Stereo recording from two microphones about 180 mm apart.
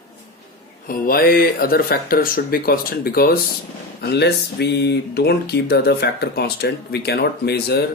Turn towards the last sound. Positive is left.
turn(degrees=65)  # may be behind; listen again after turning